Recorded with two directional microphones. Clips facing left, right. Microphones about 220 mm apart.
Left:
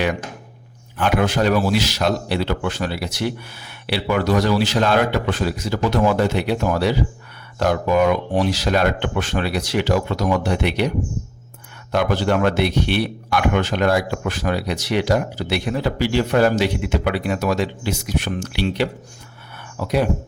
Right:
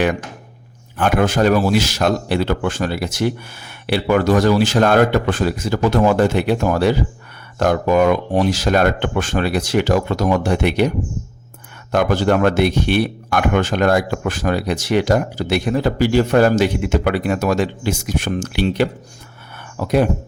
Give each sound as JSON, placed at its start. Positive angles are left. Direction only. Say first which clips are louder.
{"t": 0.9, "sound": "a man's voice", "louder": "right 3 dB", "side_deg": -45}
{"t": 11.9, "sound": "a man's voice", "louder": "right 3 dB", "side_deg": -45}